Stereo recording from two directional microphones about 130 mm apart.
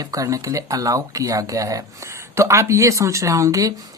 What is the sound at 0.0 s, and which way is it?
Speech, 25° right (ahead or behind).